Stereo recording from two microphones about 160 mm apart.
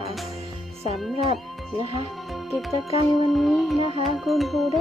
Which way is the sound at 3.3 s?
Centre (ahead or behind).